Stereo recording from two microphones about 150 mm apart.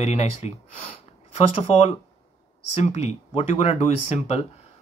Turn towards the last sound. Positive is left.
turn(degrees=45)  # may be behind; listen again after turning